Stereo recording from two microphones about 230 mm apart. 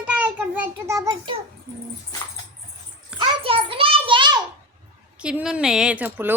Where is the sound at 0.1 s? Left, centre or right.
Centre.